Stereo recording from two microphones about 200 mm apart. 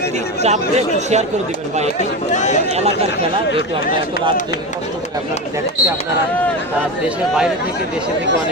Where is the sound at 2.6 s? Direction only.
30° right (ahead or behind).